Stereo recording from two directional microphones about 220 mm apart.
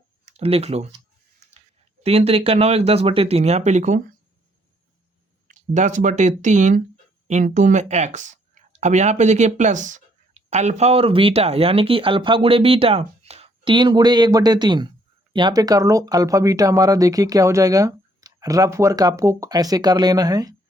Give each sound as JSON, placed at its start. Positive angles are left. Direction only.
{"t": 0.3, "sound": "speech", "side_deg": -30}
{"t": 2.0, "sound": "speech", "side_deg": -25}
{"t": 5.5, "sound": "speech", "side_deg": -35}